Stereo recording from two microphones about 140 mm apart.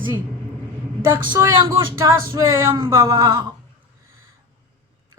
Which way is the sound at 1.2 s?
30° right (ahead or behind).